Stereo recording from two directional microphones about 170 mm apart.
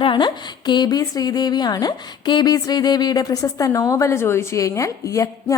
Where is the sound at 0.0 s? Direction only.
25° left (ahead or behind).